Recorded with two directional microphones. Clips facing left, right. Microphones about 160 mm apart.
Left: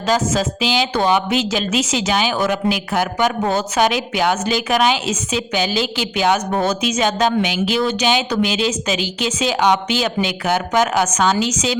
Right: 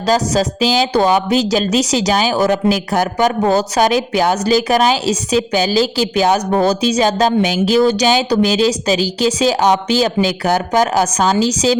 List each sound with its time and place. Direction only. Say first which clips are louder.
0.0 s speech: right 3 dB; 35° right (ahead or behind)